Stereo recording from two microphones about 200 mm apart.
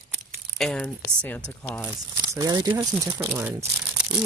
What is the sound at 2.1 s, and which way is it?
Speech, 15° right (ahead or behind).